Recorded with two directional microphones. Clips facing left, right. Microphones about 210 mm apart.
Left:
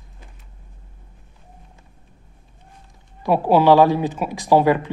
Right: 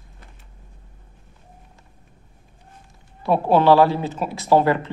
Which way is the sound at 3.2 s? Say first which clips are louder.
Left 1 dB; 10° left (ahead or behind).